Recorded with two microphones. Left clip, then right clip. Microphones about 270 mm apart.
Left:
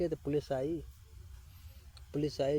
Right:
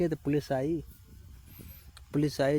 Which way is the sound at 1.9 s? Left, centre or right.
Right.